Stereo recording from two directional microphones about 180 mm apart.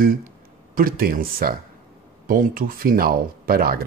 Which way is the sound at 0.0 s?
50° right (ahead or behind).